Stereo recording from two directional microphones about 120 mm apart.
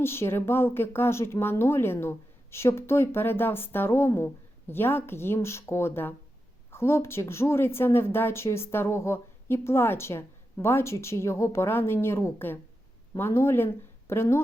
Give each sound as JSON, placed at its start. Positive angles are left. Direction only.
{"t": 0.0, "sound": "speech", "side_deg": 20}